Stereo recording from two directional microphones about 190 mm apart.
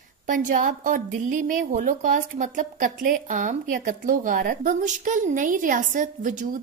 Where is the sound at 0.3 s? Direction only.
45° right (ahead or behind).